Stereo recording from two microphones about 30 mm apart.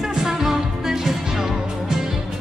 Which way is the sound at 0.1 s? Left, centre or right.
Centre.